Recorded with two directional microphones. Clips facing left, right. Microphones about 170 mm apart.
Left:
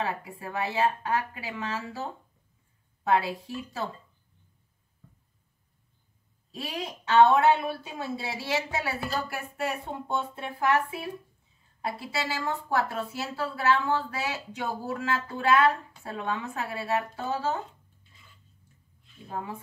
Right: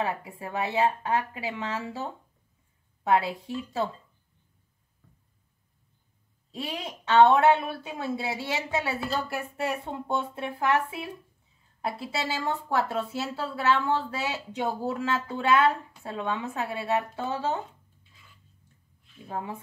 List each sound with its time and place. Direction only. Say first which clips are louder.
0.2 s a woman's voice: right 1 dB; 25° right (ahead or behind)
6.5 s a woman's voice: even; 25° right (ahead or behind)